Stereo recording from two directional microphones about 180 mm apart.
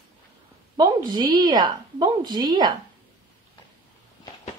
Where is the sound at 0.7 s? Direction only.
25° right (ahead or behind).